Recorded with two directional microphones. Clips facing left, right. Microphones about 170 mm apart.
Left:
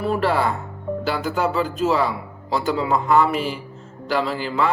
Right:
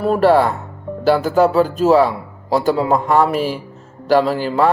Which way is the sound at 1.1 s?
45° right (ahead or behind).